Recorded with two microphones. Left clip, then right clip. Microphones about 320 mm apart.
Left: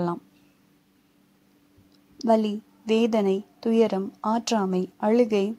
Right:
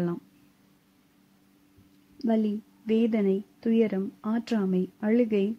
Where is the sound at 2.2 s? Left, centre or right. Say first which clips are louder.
Left 6 dB; left.